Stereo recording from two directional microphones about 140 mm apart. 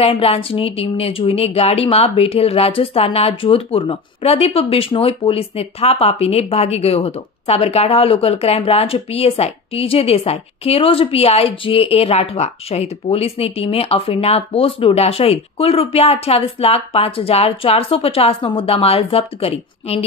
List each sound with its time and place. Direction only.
0.0 s speech: 45° left (ahead or behind)